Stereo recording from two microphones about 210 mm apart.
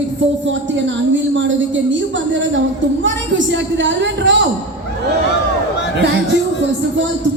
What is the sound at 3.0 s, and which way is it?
A woman's voice, 60° right (ahead or behind).